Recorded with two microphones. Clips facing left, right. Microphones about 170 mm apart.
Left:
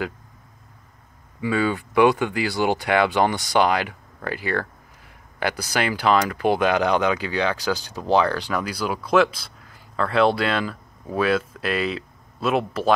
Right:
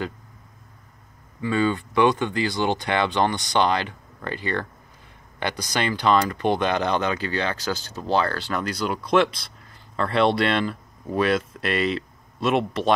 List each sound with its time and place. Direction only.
1.4 s speech: 10° left (ahead or behind)